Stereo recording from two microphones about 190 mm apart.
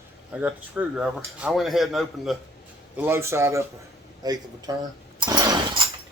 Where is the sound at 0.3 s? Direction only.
5° right (ahead or behind).